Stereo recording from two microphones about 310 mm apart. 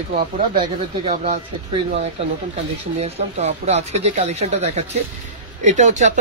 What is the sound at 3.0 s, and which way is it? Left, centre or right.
Speech, right.